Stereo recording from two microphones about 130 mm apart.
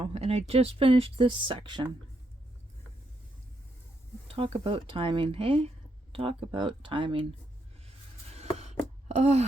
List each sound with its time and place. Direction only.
0.0 s speech: 55° right (ahead or behind); by 1.9 s 35° right (ahead or behind)
4.3 s speech: 45° right (ahead or behind)
7.9 s a sound: 55° right (ahead or behind)
9.0 s speech: 60° right (ahead or behind)